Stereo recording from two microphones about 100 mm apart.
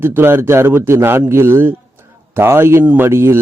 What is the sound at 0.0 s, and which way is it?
A man's voice, 25° right (ahead or behind).